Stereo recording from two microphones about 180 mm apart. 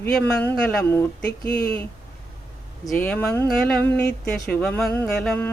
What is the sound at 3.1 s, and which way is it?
Speech, 5° left (ahead or behind).